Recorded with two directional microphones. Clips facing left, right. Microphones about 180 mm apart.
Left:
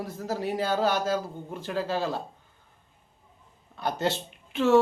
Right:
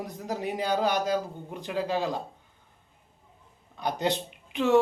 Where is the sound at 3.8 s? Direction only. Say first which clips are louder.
Even; 15° right (ahead or behind).